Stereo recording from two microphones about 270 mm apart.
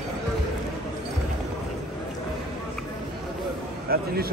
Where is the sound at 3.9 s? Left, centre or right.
Right.